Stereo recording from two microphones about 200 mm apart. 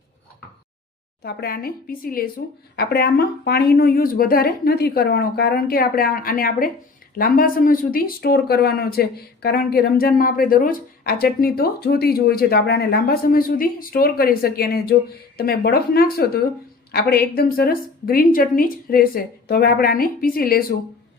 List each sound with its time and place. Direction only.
1.2 s speech: 50° left (ahead or behind)